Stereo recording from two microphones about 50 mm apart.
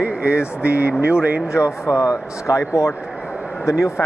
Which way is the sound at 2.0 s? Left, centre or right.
Left.